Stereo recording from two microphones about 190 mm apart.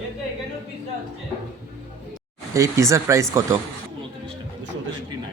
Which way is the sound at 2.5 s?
15° right (ahead or behind).